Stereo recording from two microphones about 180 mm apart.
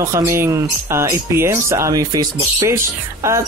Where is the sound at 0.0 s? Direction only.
15° right (ahead or behind).